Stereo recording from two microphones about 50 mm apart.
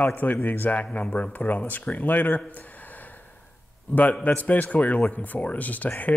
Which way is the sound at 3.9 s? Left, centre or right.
Left.